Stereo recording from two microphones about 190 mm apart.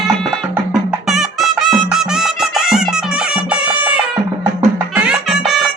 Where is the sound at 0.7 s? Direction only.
Centre (ahead or behind).